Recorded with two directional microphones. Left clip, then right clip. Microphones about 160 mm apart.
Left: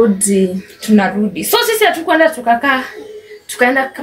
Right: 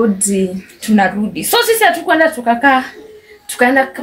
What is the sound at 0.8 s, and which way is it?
A woman's voice, 25° right (ahead or behind).